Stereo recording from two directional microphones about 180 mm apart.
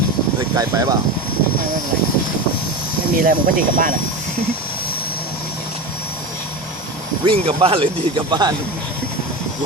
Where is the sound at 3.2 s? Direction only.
50° right (ahead or behind).